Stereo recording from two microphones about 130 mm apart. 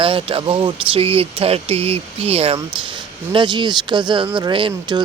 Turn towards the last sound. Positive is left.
turn(degrees=-35)  # may be behind; listen again after turning